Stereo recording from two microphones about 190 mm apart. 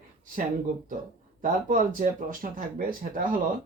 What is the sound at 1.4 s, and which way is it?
Speech, 45° right (ahead or behind).